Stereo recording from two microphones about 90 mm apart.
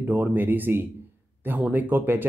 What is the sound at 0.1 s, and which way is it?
Speech, 20° right (ahead or behind).